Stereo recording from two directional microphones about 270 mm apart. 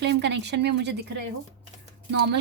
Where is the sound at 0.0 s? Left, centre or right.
Right.